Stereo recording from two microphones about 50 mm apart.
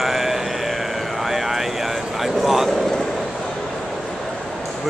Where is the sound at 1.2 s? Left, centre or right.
Centre.